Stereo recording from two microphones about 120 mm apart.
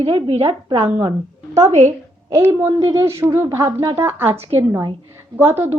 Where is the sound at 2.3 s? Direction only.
25° right (ahead or behind).